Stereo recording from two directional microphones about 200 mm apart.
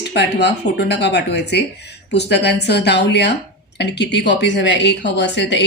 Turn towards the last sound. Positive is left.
turn(degrees=60)  # may be behind; listen again after turning